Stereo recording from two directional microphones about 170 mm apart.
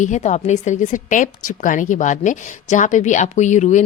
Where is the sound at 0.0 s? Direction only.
45° left (ahead or behind).